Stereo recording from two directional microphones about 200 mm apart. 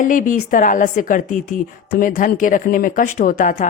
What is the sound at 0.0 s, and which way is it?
Speech, 40° left (ahead or behind).